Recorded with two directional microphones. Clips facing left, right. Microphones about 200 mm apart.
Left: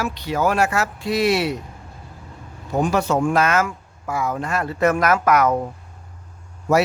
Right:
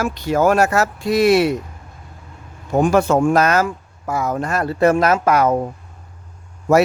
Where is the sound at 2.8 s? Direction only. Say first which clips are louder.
Right 5 dB; 50° right (ahead or behind); by 5.7 s 30° right (ahead or behind).